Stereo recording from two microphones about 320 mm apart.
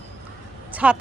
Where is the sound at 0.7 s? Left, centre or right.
Centre.